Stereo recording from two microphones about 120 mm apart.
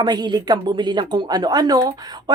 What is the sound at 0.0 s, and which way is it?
Speech, 40° right (ahead or behind).